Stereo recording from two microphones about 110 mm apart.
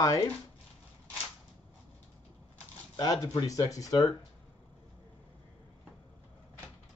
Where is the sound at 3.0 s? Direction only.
35° left (ahead or behind).